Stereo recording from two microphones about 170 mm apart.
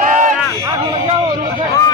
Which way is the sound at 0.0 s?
50° right (ahead or behind).